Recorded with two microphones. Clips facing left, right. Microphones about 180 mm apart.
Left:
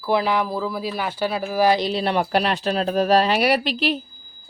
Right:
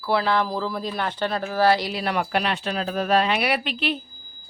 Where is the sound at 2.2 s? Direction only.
40° left (ahead or behind).